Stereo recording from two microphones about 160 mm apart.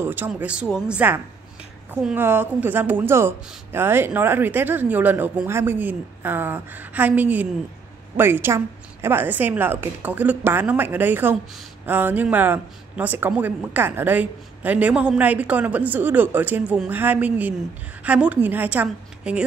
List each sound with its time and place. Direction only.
0.0 s speech: 10° right (ahead or behind)